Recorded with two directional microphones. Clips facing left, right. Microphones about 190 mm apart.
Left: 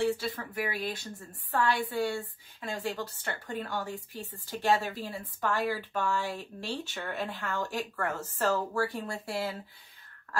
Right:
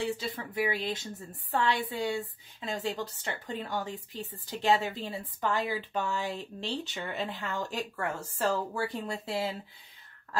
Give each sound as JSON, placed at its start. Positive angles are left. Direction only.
{"t": 0.2, "sound": "a woman's voice", "side_deg": -20}